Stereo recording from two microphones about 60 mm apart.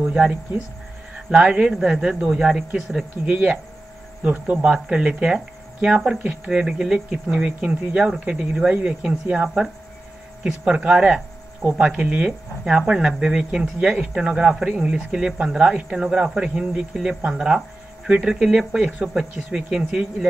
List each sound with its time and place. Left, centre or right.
1.1 s speech: centre
3.3 s speech: right; by 20.2 s centre